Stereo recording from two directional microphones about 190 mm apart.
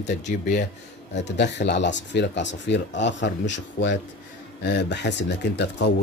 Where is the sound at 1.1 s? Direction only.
65° left (ahead or behind).